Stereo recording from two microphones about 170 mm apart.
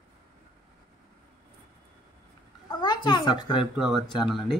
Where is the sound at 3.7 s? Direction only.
5° right (ahead or behind).